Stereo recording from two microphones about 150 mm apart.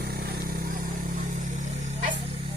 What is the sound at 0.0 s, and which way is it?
Vehicle, 90° right.